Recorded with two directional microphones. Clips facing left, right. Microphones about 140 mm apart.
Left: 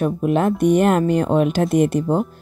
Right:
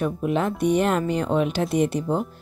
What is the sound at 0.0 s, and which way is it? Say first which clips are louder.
Speech: left 5 dB; 50° left (ahead or behind).